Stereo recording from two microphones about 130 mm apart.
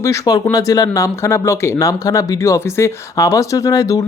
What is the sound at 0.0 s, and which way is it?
Speech, 25° left (ahead or behind).